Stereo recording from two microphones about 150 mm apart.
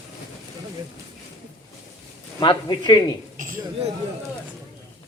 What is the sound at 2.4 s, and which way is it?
Speech, 35° left (ahead or behind).